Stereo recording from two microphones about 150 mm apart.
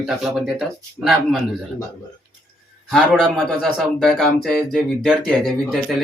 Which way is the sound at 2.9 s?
Centre (ahead or behind).